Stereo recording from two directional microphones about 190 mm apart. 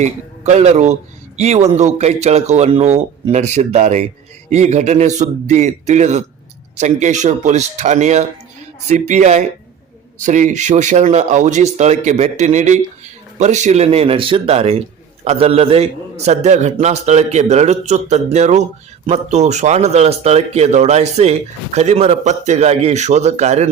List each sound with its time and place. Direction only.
0.0 s speech: 35° right (ahead or behind)